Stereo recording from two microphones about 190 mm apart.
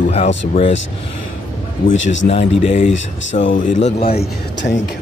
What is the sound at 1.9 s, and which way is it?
Speech, 80° left.